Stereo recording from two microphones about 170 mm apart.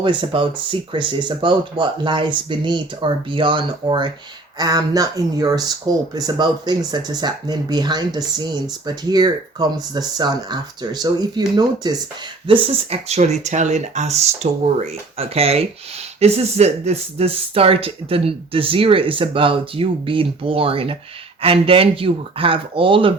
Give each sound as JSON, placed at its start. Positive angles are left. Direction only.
{"t": 0.0, "sound": "speech", "side_deg": -30}